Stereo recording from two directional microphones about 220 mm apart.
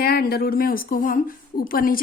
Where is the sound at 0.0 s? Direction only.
45° left (ahead or behind).